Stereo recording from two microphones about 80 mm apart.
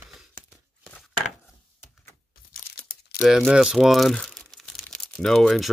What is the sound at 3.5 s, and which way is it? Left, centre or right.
Speech, centre.